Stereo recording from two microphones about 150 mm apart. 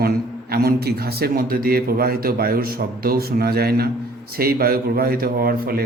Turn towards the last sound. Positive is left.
turn(degrees=-80)